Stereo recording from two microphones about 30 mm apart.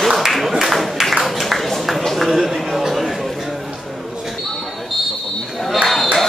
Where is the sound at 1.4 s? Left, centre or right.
Centre.